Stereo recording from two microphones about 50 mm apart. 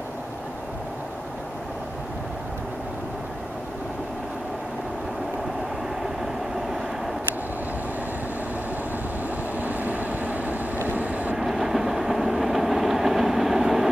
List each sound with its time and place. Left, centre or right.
9.6 s vehicle: right
11.3 s train: centre